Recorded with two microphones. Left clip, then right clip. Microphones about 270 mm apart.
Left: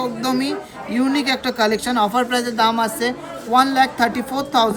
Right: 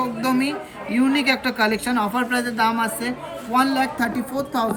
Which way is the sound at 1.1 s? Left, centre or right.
Left.